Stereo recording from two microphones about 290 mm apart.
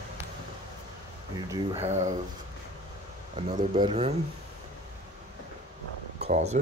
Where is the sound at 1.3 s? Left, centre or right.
Centre.